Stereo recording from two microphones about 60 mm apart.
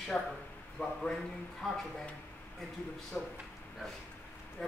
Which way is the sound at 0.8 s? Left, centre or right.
Left.